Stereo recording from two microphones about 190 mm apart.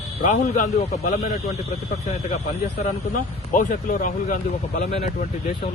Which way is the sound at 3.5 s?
45° left (ahead or behind).